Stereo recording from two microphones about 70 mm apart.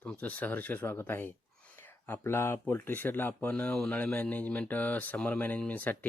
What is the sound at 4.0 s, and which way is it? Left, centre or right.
Speech, left.